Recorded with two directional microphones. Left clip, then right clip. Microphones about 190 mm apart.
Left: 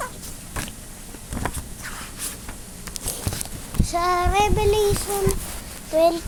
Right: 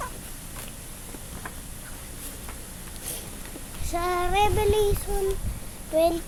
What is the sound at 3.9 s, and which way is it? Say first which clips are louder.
Child singing: left 5 dB; 15° left (ahead or behind).